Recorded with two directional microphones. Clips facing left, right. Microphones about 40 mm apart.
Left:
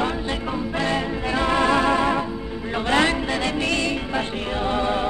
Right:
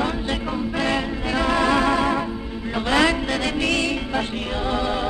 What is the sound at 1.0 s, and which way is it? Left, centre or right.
Music, left.